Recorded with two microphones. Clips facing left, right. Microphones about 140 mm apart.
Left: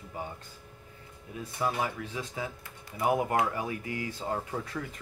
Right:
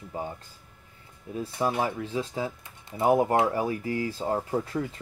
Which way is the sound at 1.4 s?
25° right (ahead or behind).